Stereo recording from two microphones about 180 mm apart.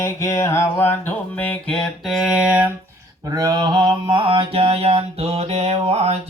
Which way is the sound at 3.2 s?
20° right (ahead or behind).